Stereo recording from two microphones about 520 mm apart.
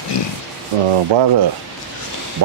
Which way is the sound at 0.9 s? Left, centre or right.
Right.